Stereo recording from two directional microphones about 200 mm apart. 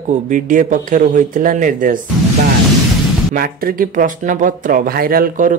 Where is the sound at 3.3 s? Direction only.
45° right (ahead or behind).